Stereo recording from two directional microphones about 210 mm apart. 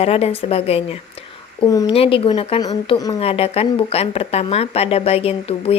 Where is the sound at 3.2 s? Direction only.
30° left (ahead or behind).